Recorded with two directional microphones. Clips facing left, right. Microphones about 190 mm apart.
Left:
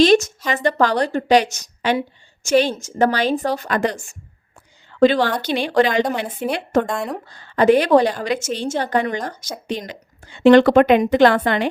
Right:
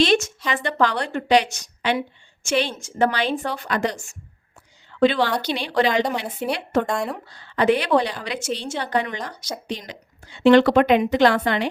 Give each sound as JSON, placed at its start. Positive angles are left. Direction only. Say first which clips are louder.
{"t": 0.0, "sound": "a woman's voice", "louder": "left 5 dB", "side_deg": 40}
{"t": 4.9, "sound": "a woman's voice", "louder": "left 3 dB", "side_deg": 40}
{"t": 6.8, "sound": "speech", "louder": "left 1 dB", "side_deg": 0}
{"t": 7.3, "sound": "a woman's voice", "louder": "left 5 dB", "side_deg": 45}